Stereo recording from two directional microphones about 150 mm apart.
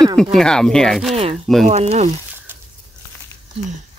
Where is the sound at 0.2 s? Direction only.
5° left (ahead or behind).